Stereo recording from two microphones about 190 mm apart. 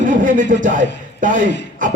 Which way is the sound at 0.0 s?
45° right (ahead or behind).